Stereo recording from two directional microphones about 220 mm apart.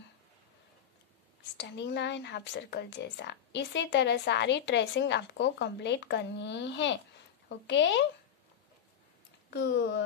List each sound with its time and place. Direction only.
1.6 s speech: 50° left (ahead or behind)
9.5 s speech: 50° left (ahead or behind)